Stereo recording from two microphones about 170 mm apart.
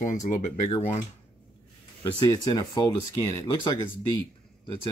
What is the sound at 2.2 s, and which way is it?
Speech, 25° left (ahead or behind).